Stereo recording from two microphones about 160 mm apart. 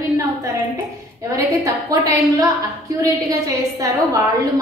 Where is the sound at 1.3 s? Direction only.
20° right (ahead or behind).